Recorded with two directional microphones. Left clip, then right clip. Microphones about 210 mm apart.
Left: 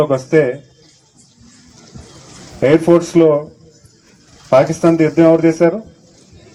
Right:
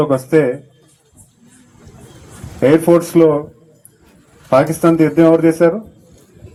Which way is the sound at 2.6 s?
55° right (ahead or behind).